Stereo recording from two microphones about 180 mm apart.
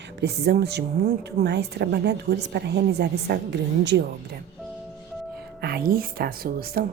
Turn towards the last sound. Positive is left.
turn(degrees=-55)  # may be behind; listen again after turning